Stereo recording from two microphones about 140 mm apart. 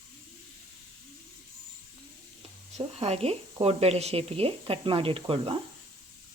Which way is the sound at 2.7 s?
50° right (ahead or behind).